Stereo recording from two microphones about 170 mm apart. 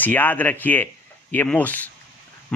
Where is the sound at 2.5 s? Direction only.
5° left (ahead or behind).